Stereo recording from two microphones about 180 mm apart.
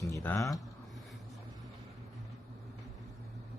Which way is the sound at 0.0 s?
15° left (ahead or behind).